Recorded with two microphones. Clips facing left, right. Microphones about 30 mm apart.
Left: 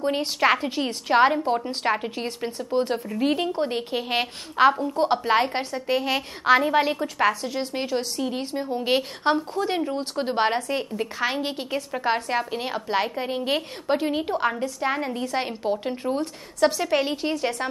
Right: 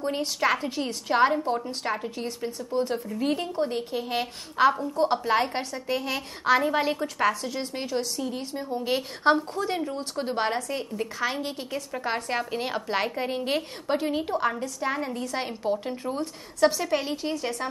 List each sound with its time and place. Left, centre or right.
0.0 s a woman's voice: left
9.2 s a woman's voice: centre
9.7 s a woman's voice: left
12.3 s a woman's voice: centre; by 17.6 s left